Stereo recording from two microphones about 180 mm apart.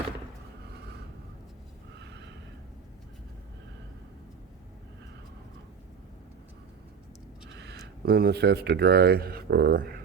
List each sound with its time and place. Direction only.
7.5 s speech: 65° right (ahead or behind)